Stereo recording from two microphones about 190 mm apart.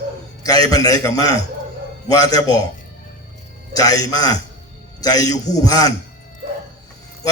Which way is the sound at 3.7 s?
20° left (ahead or behind).